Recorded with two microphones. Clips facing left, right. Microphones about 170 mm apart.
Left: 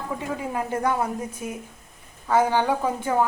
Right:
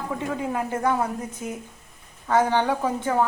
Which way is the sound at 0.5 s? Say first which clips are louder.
Even; 10° left (ahead or behind).